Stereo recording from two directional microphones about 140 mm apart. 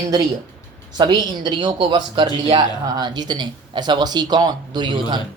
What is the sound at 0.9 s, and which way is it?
Speech, 35° right (ahead or behind).